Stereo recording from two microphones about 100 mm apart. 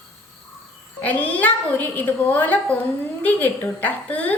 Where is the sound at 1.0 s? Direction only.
15° left (ahead or behind).